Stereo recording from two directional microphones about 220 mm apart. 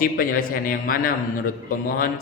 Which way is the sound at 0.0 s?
40° left (ahead or behind).